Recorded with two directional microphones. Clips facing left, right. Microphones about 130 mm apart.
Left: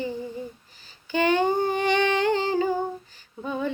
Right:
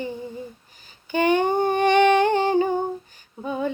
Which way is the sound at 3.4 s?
15° right (ahead or behind).